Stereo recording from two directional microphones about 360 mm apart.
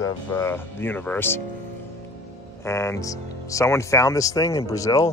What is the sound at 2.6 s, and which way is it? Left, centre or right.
Speech, centre.